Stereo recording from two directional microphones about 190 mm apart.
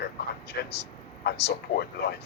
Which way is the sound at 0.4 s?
60° left (ahead or behind).